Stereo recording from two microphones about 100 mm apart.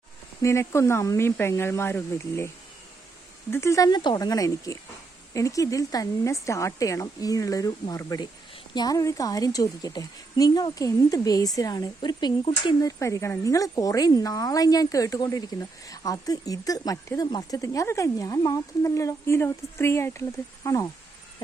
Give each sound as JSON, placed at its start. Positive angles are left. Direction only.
{"t": 0.4, "sound": "speech", "side_deg": 30}
{"t": 3.5, "sound": "speech", "side_deg": 30}
{"t": 3.8, "sound": "speech", "side_deg": 45}
{"t": 12.8, "sound": "speech", "side_deg": 30}